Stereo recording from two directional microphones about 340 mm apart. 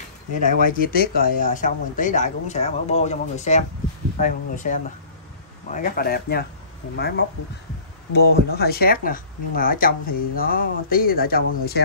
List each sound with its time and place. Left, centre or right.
0.4 s speech: left